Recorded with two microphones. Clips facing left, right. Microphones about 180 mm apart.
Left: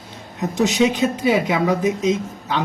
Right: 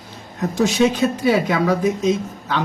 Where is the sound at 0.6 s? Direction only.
20° left (ahead or behind).